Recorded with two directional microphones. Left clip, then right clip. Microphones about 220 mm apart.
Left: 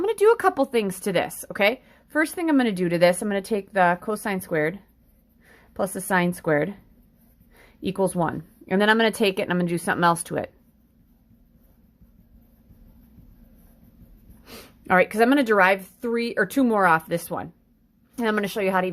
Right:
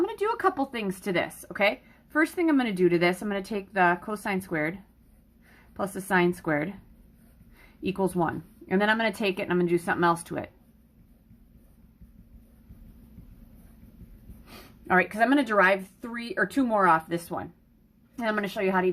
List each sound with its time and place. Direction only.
0.0 s speech: 45° left (ahead or behind)
14.4 s speech: 40° left (ahead or behind)